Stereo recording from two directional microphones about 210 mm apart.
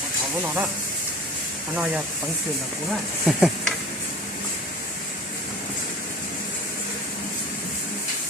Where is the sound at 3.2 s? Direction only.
Centre (ahead or behind).